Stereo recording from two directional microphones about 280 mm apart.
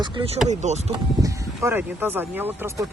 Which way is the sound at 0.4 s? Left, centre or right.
Right.